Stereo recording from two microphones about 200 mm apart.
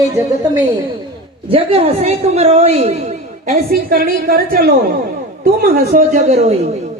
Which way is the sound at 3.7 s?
50° right (ahead or behind).